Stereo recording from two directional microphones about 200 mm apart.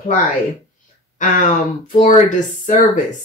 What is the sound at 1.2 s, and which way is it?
Speech, 40° left (ahead or behind).